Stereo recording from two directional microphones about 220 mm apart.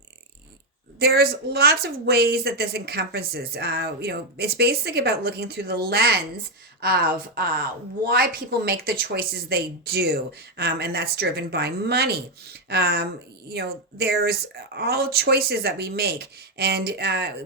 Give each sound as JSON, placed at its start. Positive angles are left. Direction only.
{"t": 0.9, "sound": "a woman's voice", "side_deg": -45}